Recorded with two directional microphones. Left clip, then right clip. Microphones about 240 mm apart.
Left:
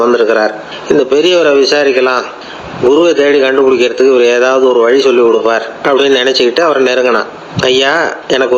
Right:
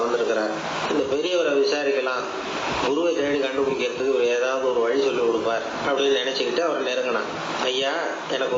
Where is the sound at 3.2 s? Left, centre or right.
Left.